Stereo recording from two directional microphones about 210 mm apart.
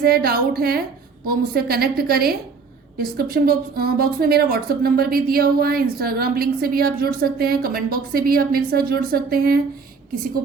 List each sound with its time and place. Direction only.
0.0 s speech: 45° right (ahead or behind)